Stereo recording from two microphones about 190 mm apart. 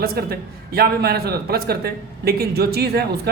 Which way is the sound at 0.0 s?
55° right (ahead or behind).